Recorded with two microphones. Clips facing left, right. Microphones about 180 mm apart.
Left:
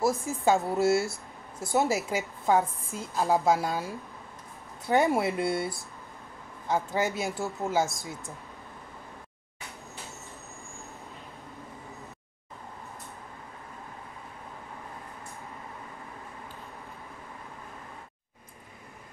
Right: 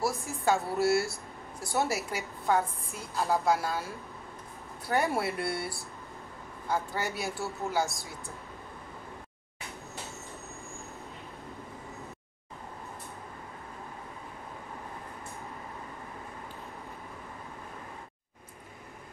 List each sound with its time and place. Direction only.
0.0 s a woman's voice: 20° left (ahead or behind)